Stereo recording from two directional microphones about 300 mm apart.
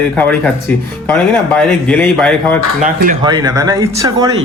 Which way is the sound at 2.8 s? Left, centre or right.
Right.